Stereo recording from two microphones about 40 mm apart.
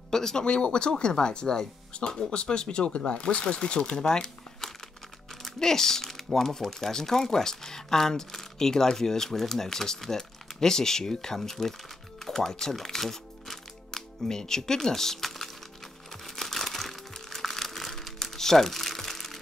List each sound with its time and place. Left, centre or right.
0.1 s speech: centre
12.3 s music: centre
16.1 s crumpling: centre